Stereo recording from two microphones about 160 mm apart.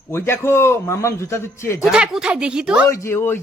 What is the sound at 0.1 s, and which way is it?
A man's voice, 15° left (ahead or behind).